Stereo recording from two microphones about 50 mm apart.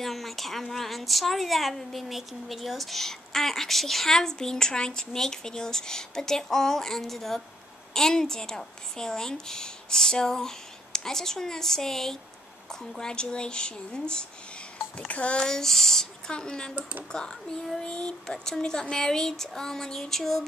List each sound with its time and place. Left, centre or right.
0.0 s a woman's voice: centre; by 15.4 s left
15.4 s a woman's voice: centre